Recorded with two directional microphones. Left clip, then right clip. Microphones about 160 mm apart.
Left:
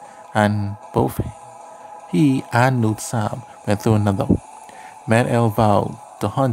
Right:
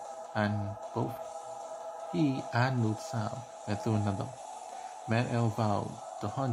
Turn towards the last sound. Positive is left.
turn(degrees=65)  # may be behind; listen again after turning